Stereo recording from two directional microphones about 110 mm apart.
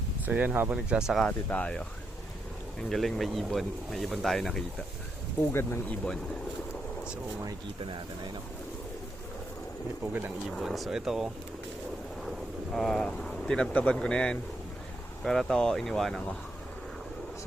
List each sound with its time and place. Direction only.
0.3 s speech: 15° right (ahead or behind)
1.2 s speech: 15° left (ahead or behind)
2.9 s speech: centre (ahead or behind)
5.5 s speech: 20° left (ahead or behind)
7.9 s speech: 50° right (ahead or behind)
10.0 s speech: 15° right (ahead or behind)
10.6 s speech: centre (ahead or behind)
12.7 s speech: centre (ahead or behind)